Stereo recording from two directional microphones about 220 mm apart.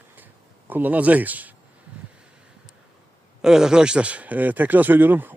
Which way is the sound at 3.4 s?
5° right (ahead or behind).